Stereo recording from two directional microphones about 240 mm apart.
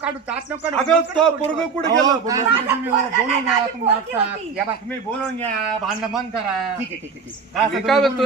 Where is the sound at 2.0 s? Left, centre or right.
Centre.